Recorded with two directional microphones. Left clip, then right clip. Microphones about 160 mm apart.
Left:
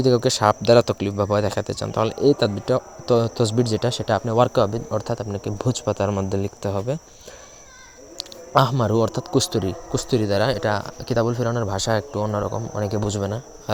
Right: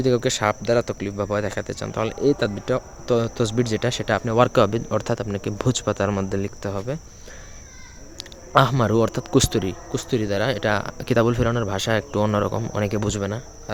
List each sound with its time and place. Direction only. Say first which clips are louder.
0.0 s speech: left 3 dB; centre (ahead or behind)
0.6 s speech: left 5 dB; 20° left (ahead or behind); by 7.0 s centre (ahead or behind)
8.8 s speech: even; 15° right (ahead or behind)
9.6 s speech: left 2 dB; centre (ahead or behind)
10.6 s speech: right 1 dB; 20° right (ahead or behind)
12.2 s speech: right 3 dB; 25° right (ahead or behind)
12.7 s speech: even; 15° right (ahead or behind)